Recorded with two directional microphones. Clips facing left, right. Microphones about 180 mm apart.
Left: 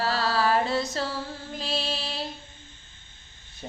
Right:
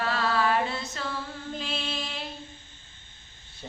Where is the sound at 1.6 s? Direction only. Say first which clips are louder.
Left 5 dB; 35° left (ahead or behind).